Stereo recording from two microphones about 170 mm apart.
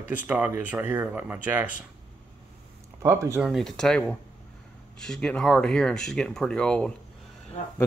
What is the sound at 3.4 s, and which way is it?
Speech, centre (ahead or behind).